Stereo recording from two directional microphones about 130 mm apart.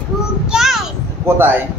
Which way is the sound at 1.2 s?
15° right (ahead or behind).